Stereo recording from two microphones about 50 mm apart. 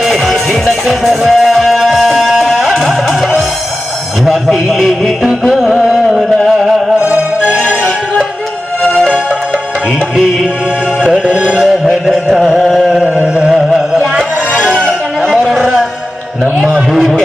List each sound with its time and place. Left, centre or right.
0.0 s music: centre
5.8 s carnatic music: centre
7.0 s music: right
7.6 s music: centre
11.5 s music: centre
12.3 s carnatic music: centre
13.7 s music: centre
15.2 s a sound: centre
16.9 s a sound: centre